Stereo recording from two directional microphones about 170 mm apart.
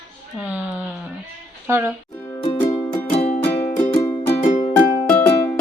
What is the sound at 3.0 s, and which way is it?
Music, 40° left (ahead or behind).